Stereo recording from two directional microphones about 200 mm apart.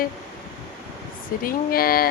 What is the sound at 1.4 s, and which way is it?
Speech, 50° left (ahead or behind).